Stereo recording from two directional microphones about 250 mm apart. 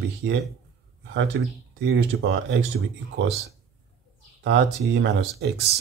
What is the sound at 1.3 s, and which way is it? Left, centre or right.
Speech, right.